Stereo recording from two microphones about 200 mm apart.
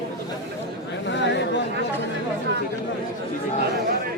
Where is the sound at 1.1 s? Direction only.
60° left (ahead or behind).